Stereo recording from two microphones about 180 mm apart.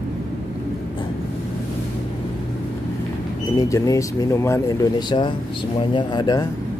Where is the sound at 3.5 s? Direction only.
20° left (ahead or behind).